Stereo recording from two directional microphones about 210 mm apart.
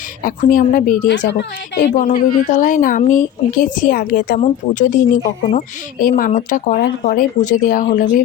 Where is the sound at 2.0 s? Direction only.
35° left (ahead or behind).